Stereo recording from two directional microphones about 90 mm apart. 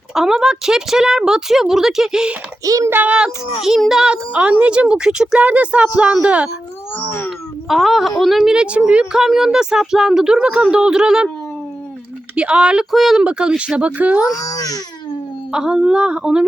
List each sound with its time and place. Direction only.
0.1 s speech: 5° right (ahead or behind)
2.6 s a child's voice: 40° right (ahead or behind)
2.9 s a child's voice: 15° right (ahead or behind)
6.9 s wail: 20° left (ahead or behind)
7.3 s a sound: 5° right (ahead or behind)
8.2 s a child's voice: centre (ahead or behind)
12.4 s a child's voice: 10° right (ahead or behind)
14.3 s speech: 40° left (ahead or behind)
15.5 s a child's voice: 10° right (ahead or behind)